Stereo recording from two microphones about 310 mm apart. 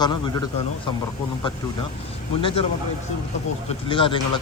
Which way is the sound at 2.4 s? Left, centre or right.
Centre.